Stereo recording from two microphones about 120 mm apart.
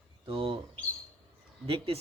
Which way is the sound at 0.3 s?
50° right (ahead or behind).